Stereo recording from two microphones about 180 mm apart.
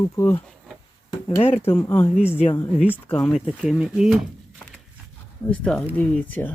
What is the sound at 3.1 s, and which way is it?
Speech, 5° left (ahead or behind).